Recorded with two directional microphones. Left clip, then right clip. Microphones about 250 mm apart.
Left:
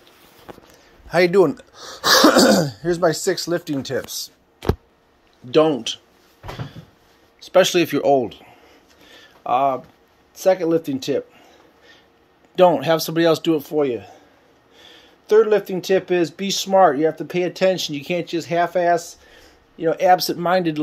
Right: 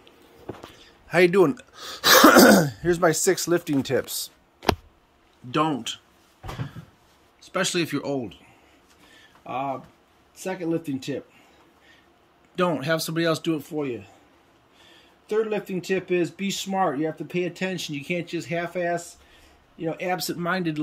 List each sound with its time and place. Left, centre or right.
1.0 s a man's voice: right
1.8 s throat clearing: centre
2.2 s speech: centre
5.5 s speech: centre
7.3 s speech: centre
9.5 s speech: centre
12.5 s speech: centre
15.2 s speech: centre